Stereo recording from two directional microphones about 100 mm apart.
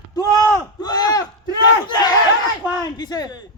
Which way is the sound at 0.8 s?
40° left (ahead or behind).